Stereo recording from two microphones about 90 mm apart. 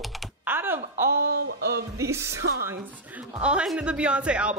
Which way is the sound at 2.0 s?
30° right (ahead or behind).